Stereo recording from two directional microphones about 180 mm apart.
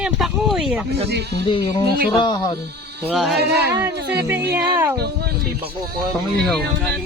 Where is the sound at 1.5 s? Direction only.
25° left (ahead or behind).